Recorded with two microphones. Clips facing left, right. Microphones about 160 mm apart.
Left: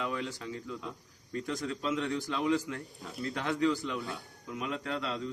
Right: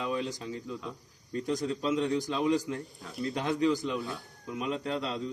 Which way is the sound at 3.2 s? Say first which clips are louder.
Right 2 dB; 20° right (ahead or behind).